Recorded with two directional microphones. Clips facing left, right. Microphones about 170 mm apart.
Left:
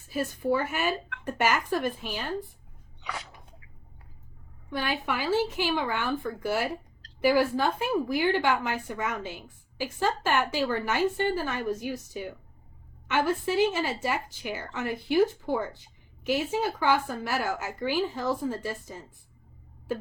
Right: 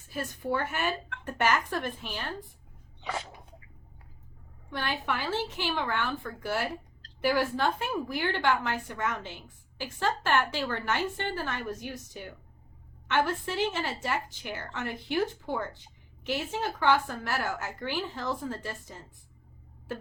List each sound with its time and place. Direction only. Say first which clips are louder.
0.1 s a woman's voice: left 5 dB; 10° left (ahead or behind)
3.0 s a sound: right 3 dB; 30° right (ahead or behind)
4.7 s a woman's voice: left 2 dB; 10° left (ahead or behind)